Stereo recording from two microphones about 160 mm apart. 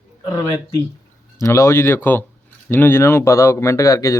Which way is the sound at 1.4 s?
20° left (ahead or behind).